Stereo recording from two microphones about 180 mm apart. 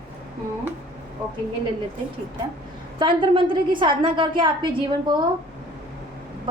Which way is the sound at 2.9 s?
30° right (ahead or behind).